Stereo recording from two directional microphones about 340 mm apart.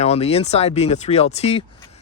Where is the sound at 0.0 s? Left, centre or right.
Centre.